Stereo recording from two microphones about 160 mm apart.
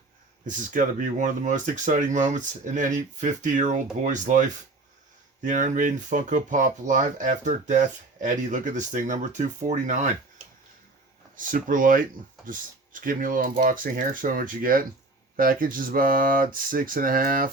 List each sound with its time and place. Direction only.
0.4 s speech: 55° right (ahead or behind)
11.3 s speech: 55° right (ahead or behind)